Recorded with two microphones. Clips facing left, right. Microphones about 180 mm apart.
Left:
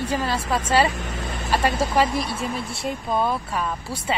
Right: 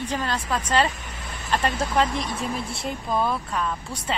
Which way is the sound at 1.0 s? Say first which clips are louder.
Left 8 dB; 80° left.